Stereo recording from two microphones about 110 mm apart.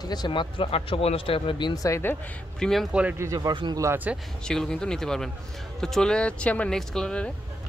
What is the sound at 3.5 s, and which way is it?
Speech, 45° right (ahead or behind).